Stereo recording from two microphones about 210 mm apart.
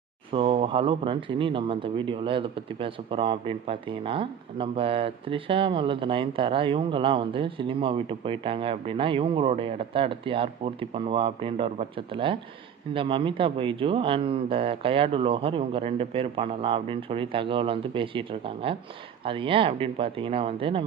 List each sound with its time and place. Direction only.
0.3 s speech: 25° right (ahead or behind)